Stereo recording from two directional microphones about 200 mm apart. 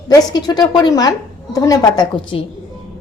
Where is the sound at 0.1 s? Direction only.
20° left (ahead or behind).